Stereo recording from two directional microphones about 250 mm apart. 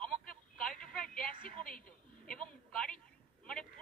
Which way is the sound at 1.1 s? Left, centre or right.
Left.